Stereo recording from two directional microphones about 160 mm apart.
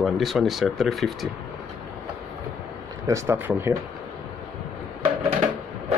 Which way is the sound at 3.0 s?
15° right (ahead or behind).